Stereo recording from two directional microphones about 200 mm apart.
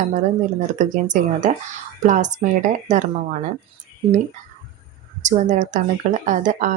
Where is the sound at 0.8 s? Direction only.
40° right (ahead or behind).